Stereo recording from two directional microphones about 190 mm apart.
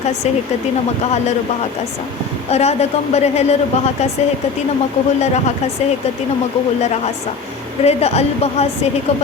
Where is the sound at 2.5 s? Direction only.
35° left (ahead or behind).